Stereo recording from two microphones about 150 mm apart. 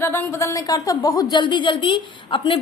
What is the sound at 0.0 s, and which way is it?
A woman's voice, 15° left (ahead or behind).